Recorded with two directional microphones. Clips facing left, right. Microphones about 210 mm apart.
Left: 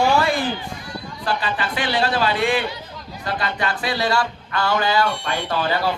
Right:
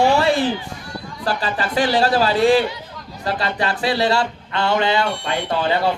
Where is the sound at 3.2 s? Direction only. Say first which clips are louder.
Right 3 dB; 30° right (ahead or behind).